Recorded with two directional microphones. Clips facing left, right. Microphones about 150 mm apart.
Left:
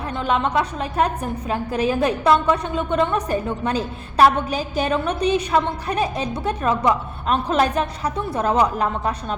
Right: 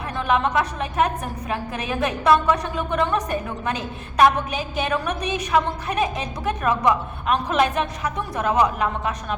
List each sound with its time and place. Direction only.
0.2 s a woman's voice: 30° left (ahead or behind)